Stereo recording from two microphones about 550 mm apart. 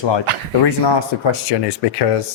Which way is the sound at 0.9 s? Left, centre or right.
Left.